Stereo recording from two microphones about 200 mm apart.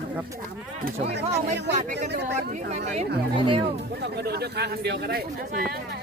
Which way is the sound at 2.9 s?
25° right (ahead or behind).